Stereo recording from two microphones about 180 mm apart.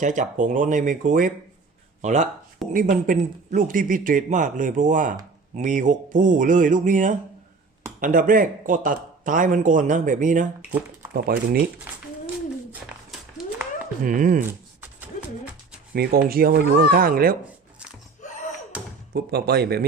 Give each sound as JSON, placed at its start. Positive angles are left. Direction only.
{"t": 0.0, "sound": "speech", "side_deg": -45}
{"t": 11.1, "sound": "speech", "side_deg": -55}
{"t": 14.0, "sound": "speech", "side_deg": -50}
{"t": 16.0, "sound": "speech", "side_deg": -55}
{"t": 19.1, "sound": "speech", "side_deg": -60}